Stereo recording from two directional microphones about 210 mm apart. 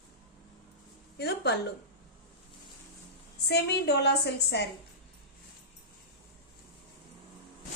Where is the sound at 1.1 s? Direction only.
50° left (ahead or behind).